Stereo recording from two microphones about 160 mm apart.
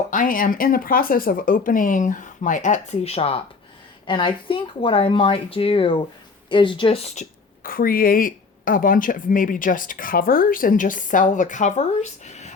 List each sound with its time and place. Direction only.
0.1 s speech: 60° left (ahead or behind)
7.6 s speech: 65° left (ahead or behind); by 12.5 s 45° left (ahead or behind)